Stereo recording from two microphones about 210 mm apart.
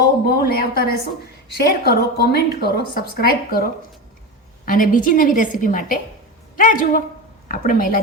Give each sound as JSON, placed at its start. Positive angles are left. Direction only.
{"t": 0.3, "sound": "a woman's voice", "side_deg": 50}